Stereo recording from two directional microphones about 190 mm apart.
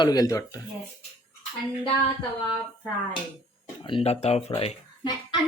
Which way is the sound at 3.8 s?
30° left (ahead or behind).